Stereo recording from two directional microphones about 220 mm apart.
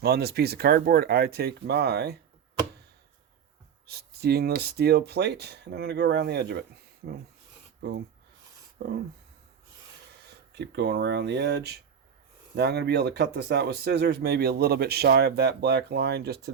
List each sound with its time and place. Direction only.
0.0 s speech: 45° right (ahead or behind)
3.8 s speech: 45° right (ahead or behind)
10.6 s speech: 50° right (ahead or behind)